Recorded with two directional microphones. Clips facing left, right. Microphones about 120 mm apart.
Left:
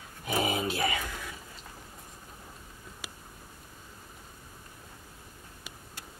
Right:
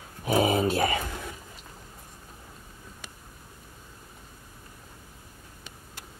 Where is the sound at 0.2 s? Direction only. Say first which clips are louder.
Right 7 dB; 35° right (ahead or behind).